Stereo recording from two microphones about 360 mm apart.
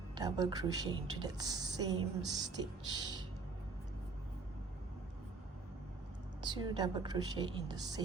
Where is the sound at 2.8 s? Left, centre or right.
Centre.